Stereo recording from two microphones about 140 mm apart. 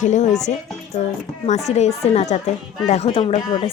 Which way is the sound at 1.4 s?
55° left (ahead or behind).